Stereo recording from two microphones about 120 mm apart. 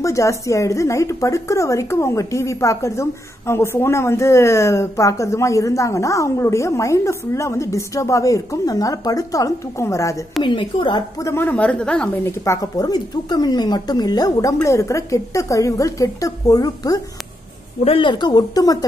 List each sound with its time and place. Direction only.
0.0 s speech: 25° left (ahead or behind)
10.4 s a woman's voice: 45° left (ahead or behind)
11.1 s speech: 20° left (ahead or behind)
12.3 s speech: 25° left (ahead or behind)
17.8 s speech: 45° left (ahead or behind)